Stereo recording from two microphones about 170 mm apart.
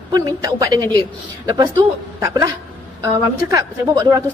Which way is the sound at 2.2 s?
20° right (ahead or behind).